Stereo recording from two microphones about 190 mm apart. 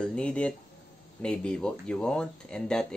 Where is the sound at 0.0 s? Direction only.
5° left (ahead or behind).